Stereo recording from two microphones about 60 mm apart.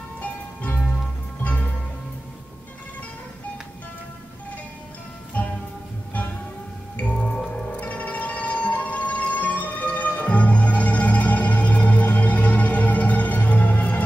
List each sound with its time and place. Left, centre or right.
0.2 s music: left
5.4 s music: left
7.0 s music: left
7.8 s music: left